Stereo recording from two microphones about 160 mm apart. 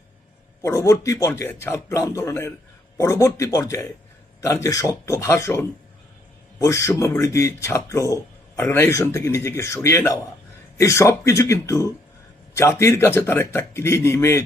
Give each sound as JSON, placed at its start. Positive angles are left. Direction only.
{"t": 0.6, "sound": "speech", "side_deg": 20}